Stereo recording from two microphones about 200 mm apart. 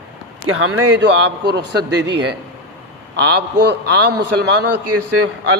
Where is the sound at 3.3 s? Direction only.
55° right (ahead or behind).